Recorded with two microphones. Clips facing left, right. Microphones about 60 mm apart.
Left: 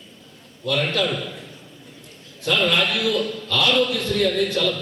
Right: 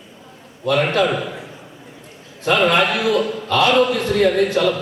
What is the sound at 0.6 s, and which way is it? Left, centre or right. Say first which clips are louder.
A man's voice: right 6 dB; right.